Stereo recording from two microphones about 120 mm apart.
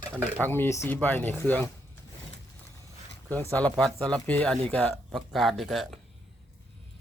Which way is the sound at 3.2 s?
10° left (ahead or behind).